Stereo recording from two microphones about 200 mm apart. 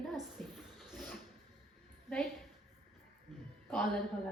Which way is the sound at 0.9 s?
5° left (ahead or behind).